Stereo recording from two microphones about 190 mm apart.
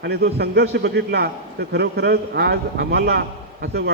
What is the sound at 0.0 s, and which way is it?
A man's voice, 60° right (ahead or behind).